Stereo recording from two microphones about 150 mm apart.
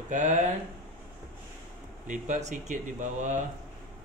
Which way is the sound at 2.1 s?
55° right (ahead or behind).